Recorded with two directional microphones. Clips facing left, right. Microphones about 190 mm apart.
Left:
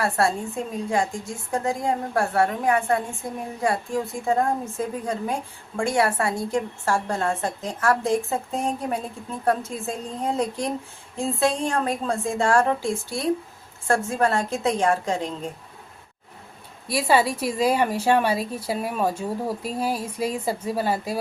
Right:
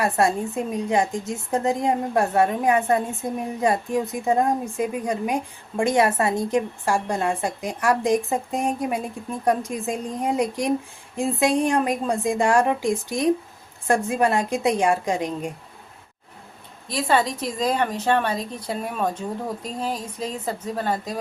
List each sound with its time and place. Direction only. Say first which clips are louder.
0.0 s a woman's voice: right 2 dB; 20° right (ahead or behind)
16.9 s a woman's voice: left 1 dB; 10° left (ahead or behind)